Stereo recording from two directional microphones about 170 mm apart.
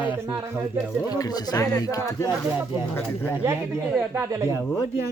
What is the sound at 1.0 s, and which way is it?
Speech, 20° left (ahead or behind).